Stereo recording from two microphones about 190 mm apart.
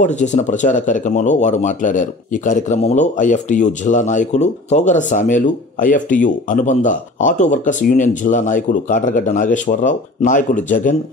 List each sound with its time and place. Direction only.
0.0 s speech: 40° left (ahead or behind)